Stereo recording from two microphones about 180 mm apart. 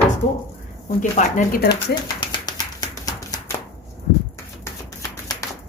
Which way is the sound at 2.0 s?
25° left (ahead or behind).